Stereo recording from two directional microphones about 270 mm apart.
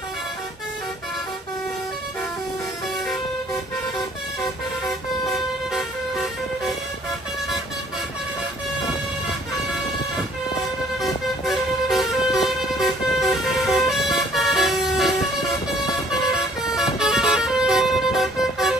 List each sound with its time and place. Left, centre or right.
5.7 s vehicle: centre
11.0 s vehicle: centre